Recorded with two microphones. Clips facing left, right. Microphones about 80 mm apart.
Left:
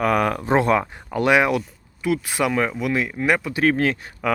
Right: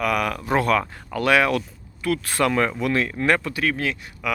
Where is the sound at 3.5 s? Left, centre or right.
Left.